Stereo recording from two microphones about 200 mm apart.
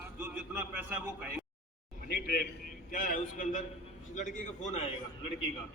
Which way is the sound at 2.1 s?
50° left (ahead or behind).